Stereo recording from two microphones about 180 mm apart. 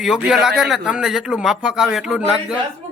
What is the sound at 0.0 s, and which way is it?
A man's voice, 5° right (ahead or behind).